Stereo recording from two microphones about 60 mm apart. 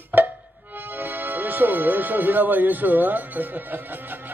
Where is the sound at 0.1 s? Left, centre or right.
Right.